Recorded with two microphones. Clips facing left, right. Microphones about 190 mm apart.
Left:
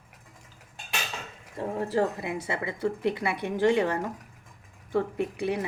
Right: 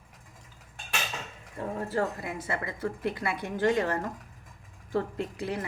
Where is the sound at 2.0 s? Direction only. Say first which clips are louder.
Left 4 dB; 20° left (ahead or behind).